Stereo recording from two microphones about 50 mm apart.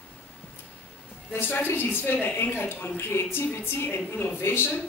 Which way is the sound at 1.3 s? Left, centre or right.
Left.